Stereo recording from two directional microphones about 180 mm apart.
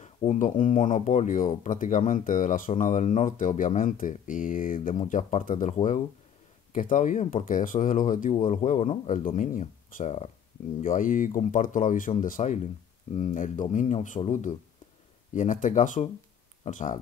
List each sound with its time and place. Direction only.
0.0 s speech: 40° left (ahead or behind)